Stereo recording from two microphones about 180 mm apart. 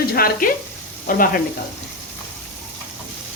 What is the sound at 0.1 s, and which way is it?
A woman's voice, 55° left (ahead or behind).